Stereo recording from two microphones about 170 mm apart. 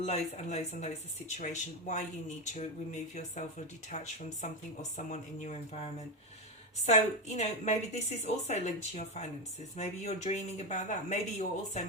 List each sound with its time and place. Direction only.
0.0 s a woman's voice: 40° left (ahead or behind)